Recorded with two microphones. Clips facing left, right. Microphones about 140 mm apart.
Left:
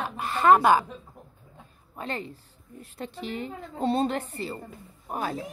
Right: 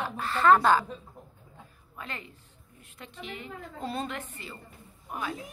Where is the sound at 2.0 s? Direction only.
30° left (ahead or behind).